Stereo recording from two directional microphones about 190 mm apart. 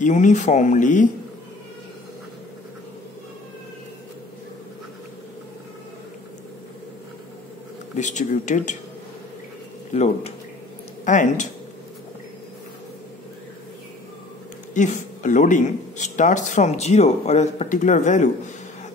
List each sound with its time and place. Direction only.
0.0 s speech: 40° left (ahead or behind)
7.9 s speech: 40° left (ahead or behind)
11.1 s speech: 40° left (ahead or behind)
14.7 s speech: 40° left (ahead or behind)